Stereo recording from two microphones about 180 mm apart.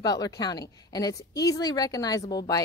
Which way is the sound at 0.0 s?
20° left (ahead or behind).